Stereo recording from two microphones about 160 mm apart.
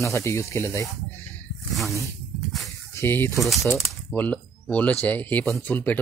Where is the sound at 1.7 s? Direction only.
Centre (ahead or behind).